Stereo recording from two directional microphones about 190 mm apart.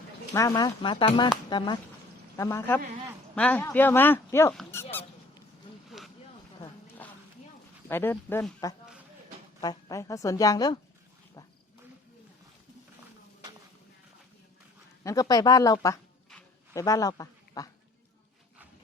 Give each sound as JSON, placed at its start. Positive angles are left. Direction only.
{"t": 0.3, "sound": "speech", "side_deg": 20}
{"t": 4.7, "sound": "dog", "side_deg": 10}
{"t": 7.0, "sound": "a sound", "side_deg": 10}
{"t": 7.9, "sound": "speech", "side_deg": 10}
{"t": 15.0, "sound": "speech", "side_deg": 20}